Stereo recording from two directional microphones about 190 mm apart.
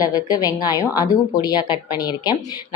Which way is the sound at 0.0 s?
20° left (ahead or behind).